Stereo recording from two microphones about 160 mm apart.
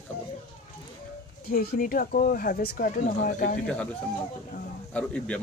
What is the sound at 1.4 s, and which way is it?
Speech, 70° left (ahead or behind).